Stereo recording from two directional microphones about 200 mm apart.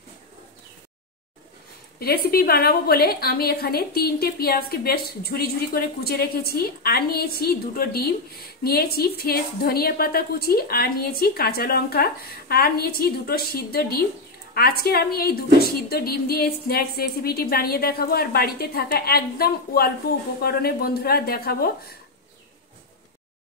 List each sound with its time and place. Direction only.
2.0 s a woman's voice: 50° left (ahead or behind)